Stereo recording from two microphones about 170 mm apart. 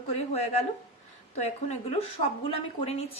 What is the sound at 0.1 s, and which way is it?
A woman's voice, 40° left (ahead or behind).